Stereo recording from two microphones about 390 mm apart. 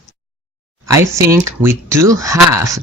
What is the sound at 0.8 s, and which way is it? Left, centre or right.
Speech, centre.